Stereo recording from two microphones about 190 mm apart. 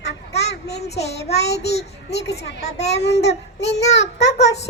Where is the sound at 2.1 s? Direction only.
60° left (ahead or behind).